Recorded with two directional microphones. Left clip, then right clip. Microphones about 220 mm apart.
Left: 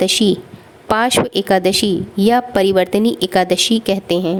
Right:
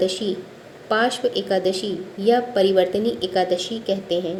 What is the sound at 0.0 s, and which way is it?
Speech, 45° left (ahead or behind).